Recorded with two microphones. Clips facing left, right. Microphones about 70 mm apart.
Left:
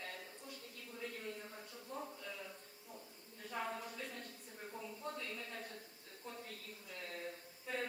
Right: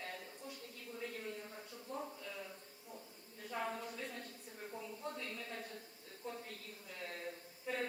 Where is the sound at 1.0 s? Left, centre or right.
Centre.